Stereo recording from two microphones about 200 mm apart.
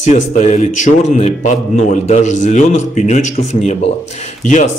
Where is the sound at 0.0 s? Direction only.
35° left (ahead or behind).